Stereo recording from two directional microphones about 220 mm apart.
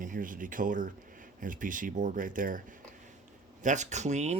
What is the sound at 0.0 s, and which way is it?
Speech, 35° right (ahead or behind).